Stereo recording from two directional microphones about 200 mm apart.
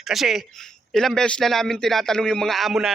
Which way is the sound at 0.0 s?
Centre (ahead or behind).